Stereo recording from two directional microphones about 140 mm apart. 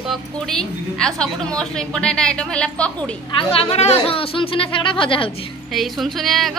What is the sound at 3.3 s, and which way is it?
Speech, 40° left (ahead or behind).